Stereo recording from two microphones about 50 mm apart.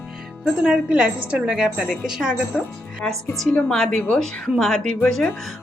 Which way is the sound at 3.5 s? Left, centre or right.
Centre.